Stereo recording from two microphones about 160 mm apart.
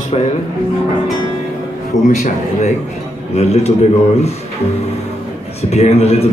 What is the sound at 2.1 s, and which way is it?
A man's voice, 45° left (ahead or behind).